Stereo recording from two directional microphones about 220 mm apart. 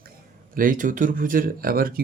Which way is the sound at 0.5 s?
40° right (ahead or behind).